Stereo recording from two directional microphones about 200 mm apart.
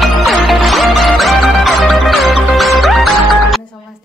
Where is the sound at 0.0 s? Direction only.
Centre (ahead or behind).